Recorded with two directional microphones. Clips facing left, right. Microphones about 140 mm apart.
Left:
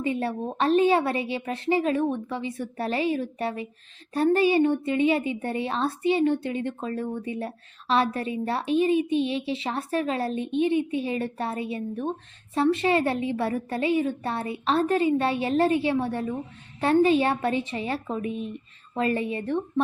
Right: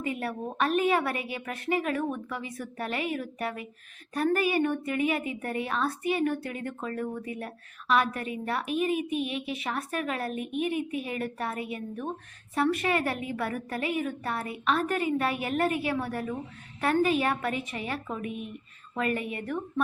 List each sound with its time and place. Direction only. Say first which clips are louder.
0.0 s a woman's voice: left 5 dB; 30° left (ahead or behind)